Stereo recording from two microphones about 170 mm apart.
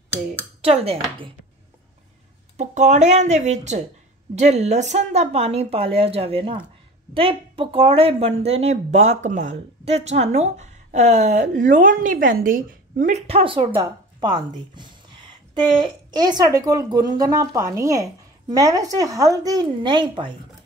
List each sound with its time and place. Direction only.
0.6 s a woman's voice: 35° right (ahead or behind)
2.5 s a woman's voice: 45° right (ahead or behind)
13.3 s a woman's voice: 30° right (ahead or behind)